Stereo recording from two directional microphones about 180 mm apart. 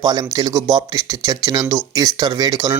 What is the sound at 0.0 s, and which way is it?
Speech, 20° right (ahead or behind).